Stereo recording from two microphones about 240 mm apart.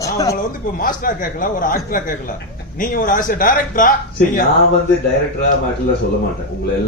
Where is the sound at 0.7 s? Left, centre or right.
Left.